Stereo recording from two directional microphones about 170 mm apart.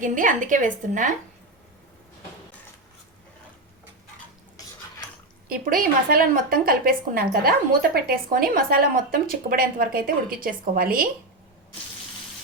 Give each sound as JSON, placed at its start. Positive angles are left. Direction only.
{"t": 0.0, "sound": "a woman's voice", "side_deg": -50}
{"t": 5.5, "sound": "a woman's voice", "side_deg": -55}